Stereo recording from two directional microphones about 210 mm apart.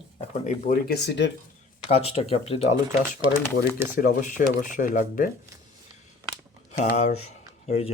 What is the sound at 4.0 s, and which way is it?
Speech, 45° left (ahead or behind).